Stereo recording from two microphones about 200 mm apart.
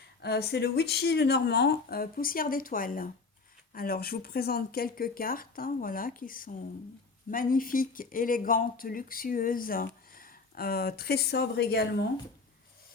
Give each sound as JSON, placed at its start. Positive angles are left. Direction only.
{"t": 0.2, "sound": "speech", "side_deg": 55}